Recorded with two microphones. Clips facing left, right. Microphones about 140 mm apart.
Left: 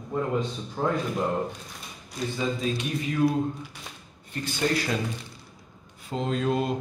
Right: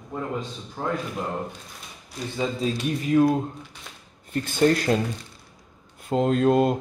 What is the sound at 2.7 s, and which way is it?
Speech, 45° right (ahead or behind).